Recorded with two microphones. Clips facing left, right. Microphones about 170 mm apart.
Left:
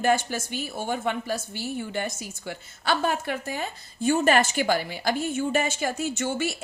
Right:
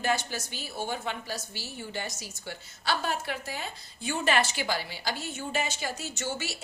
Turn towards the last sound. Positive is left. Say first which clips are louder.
# left 8 dB
turn(degrees=55)  # may be behind; listen again after turning